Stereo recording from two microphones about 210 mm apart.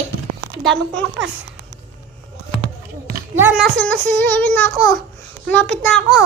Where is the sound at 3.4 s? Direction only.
5° right (ahead or behind).